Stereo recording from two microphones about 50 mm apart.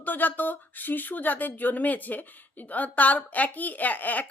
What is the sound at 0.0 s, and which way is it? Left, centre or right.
Speech, left.